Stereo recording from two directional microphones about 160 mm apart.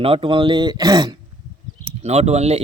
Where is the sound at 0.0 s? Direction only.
35° right (ahead or behind).